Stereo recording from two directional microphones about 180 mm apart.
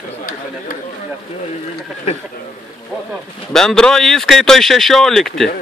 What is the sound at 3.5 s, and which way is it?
Speech, 5° left (ahead or behind).